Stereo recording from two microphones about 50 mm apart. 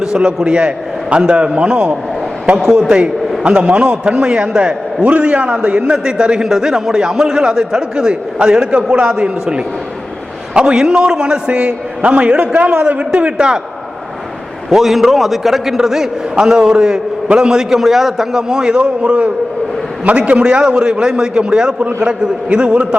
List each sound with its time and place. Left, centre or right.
0.0 s a man's voice: centre
14.7 s a man's voice: centre; by 22.8 s right